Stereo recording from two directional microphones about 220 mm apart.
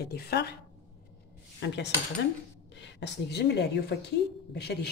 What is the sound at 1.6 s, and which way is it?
Speech, 50° left (ahead or behind).